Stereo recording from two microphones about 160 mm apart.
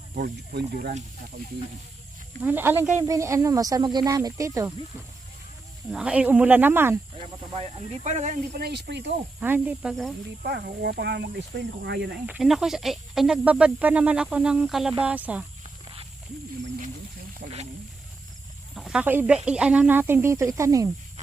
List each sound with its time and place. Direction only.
0.1 s speech: 70° right (ahead or behind)
2.4 s speech: 10° right (ahead or behind)
5.9 s speech: 5° right (ahead or behind)
7.5 s speech: 40° right (ahead or behind)
8.5 s speech: 85° right
9.4 s speech: 10° right (ahead or behind)
9.9 s speech: centre (ahead or behind)
10.4 s speech: 85° right
12.2 s speech: 5° right (ahead or behind)
15.6 s snake: 35° right (ahead or behind)
17.4 s speech: 45° right (ahead or behind)
18.7 s speech: 5° right (ahead or behind); by 20.9 s 20° right (ahead or behind)